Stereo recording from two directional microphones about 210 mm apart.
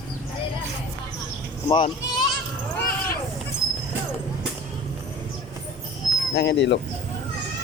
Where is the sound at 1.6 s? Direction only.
20° left (ahead or behind).